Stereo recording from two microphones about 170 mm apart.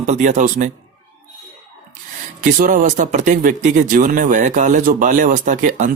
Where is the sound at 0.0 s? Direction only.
45° right (ahead or behind).